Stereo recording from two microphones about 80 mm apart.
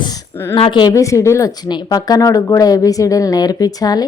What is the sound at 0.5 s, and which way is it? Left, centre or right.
Speech, left.